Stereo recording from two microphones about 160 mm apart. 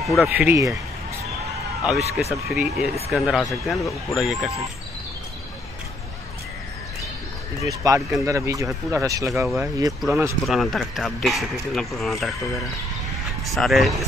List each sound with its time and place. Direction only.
0.0 s a man's voice: centre (ahead or behind)
0.5 s speech: 20° right (ahead or behind)
1.9 s a man's voice: centre (ahead or behind)
7.6 s speech: 20° right (ahead or behind)
10.4 s a man's voice: centre (ahead or behind)
13.6 s a man's voice: centre (ahead or behind)